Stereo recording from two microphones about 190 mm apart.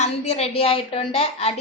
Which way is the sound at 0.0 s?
35° left (ahead or behind).